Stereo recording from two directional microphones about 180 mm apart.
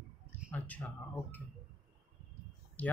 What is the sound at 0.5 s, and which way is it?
Speech, 10° left (ahead or behind).